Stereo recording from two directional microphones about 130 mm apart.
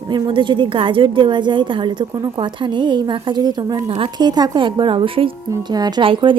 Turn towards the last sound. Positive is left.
turn(degrees=-40)  # may be behind; listen again after turning